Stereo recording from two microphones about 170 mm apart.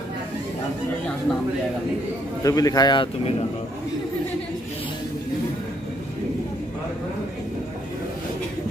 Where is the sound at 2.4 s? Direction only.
20° left (ahead or behind).